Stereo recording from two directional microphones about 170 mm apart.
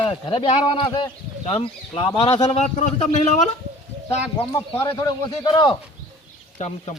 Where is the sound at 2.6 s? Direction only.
40° left (ahead or behind).